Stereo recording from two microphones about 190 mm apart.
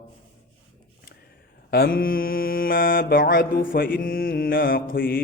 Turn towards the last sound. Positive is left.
turn(degrees=50)  # may be behind; listen again after turning